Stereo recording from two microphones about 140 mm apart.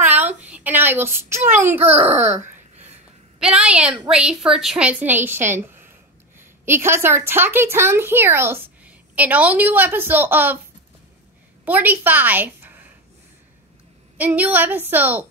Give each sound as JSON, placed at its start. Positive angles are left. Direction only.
{"t": 0.0, "sound": "a sound", "side_deg": -10}
{"t": 2.0, "sound": "a woman's voice", "side_deg": -15}
{"t": 2.2, "sound": "wail", "side_deg": -55}
{"t": 3.3, "sound": "a woman's voice", "side_deg": -5}
{"t": 11.6, "sound": "a woman's voice", "side_deg": -10}
{"t": 14.1, "sound": "a woman's voice", "side_deg": -10}